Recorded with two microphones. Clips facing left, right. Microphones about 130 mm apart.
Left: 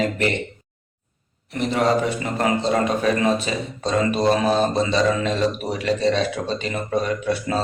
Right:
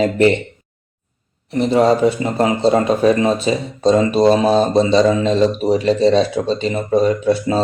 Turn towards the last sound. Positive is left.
turn(degrees=-30)  # may be behind; listen again after turning